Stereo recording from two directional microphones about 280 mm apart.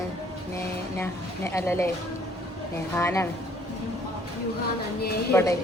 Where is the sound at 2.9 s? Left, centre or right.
Centre.